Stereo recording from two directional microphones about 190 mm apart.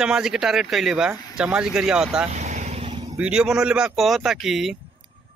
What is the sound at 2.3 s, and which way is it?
Vehicle, 35° right (ahead or behind).